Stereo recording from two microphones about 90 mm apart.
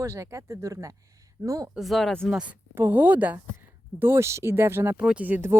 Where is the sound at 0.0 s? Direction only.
30° right (ahead or behind).